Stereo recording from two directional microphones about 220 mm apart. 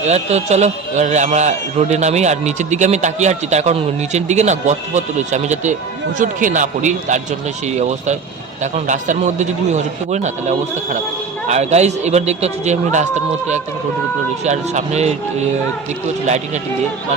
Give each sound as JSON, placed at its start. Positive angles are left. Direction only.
{"t": 0.0, "sound": "a man's voice", "side_deg": -30}
{"t": 14.4, "sound": "a man's voice", "side_deg": -30}